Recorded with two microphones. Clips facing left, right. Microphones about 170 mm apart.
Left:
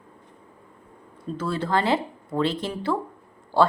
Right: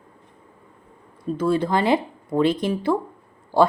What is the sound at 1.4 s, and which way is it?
Speech, 15° right (ahead or behind).